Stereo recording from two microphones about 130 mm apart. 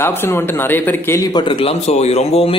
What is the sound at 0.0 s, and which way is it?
A man's voice, 15° left (ahead or behind).